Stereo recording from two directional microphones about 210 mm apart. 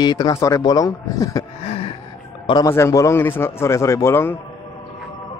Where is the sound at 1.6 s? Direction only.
30° left (ahead or behind).